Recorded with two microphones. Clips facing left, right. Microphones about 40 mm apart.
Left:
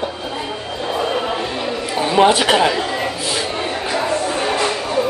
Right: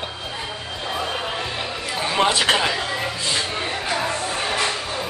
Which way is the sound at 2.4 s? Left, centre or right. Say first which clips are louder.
Left 5 dB; centre.